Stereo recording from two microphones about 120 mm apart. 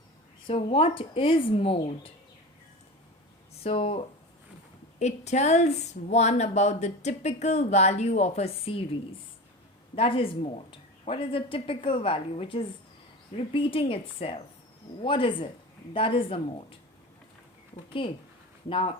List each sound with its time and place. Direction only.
0.4 s speech: 50° left (ahead or behind)
3.6 s speech: 50° left (ahead or behind)
4.9 s speech: 70° left (ahead or behind); by 16.7 s 50° left (ahead or behind)
18.0 s speech: 45° left (ahead or behind)